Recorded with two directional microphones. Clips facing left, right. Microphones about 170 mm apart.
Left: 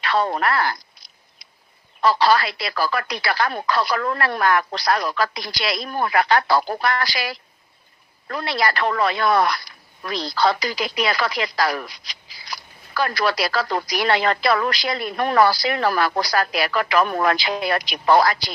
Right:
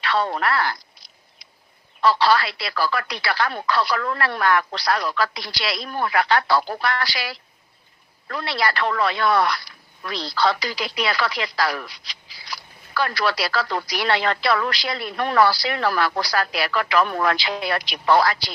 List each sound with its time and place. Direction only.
0.0 s speech: 45° left (ahead or behind)
2.0 s speech: 45° left (ahead or behind)